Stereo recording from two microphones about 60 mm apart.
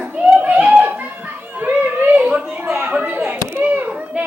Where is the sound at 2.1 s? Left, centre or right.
Right.